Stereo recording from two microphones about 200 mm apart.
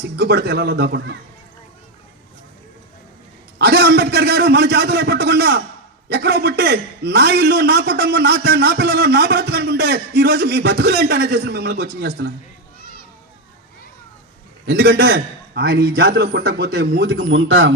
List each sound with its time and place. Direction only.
0.2 s a man's voice: 55° right (ahead or behind)
3.6 s a man's voice: 55° right (ahead or behind)
14.7 s a man's voice: 55° right (ahead or behind)
17.1 s speech: 70° right (ahead or behind)